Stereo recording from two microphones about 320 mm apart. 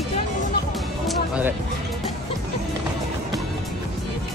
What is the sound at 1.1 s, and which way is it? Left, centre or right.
Music, centre.